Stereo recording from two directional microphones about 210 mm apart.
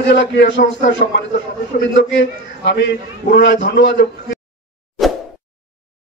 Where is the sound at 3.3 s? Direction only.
60° left (ahead or behind).